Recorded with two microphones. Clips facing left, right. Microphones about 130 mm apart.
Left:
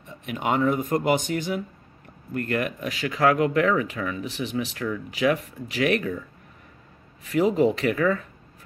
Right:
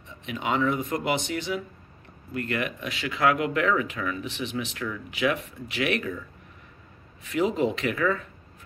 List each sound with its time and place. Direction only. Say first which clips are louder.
0.2 s speech: left 3 dB; 50° left (ahead or behind)
7.2 s speech: left 4 dB; 40° left (ahead or behind)